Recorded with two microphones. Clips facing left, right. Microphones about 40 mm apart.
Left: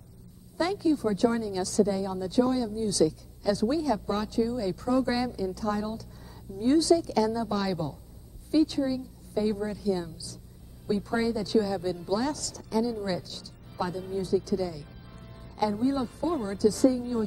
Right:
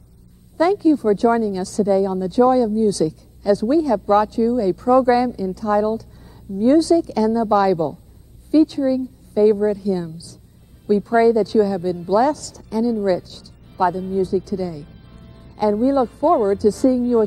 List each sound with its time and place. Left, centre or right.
0.7 s a woman's voice: right
3.9 s speech: right
4.3 s a woman's voice: right
5.3 s a woman's voice: right
13.3 s music: right
13.9 s a woman's voice: right